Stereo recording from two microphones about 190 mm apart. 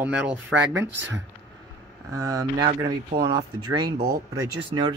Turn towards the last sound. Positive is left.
turn(degrees=-25)  # may be behind; listen again after turning